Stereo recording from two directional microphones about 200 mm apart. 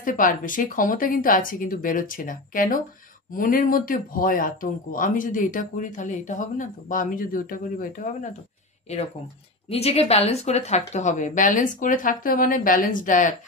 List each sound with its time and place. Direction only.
0.0 s speech: 40° left (ahead or behind)
9.7 s speech: 30° left (ahead or behind)